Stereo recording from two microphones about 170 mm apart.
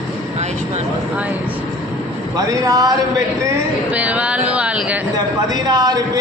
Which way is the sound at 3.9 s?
10° right (ahead or behind).